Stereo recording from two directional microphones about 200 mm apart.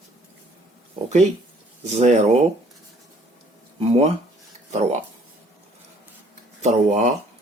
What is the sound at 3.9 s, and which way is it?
Speech, 30° right (ahead or behind).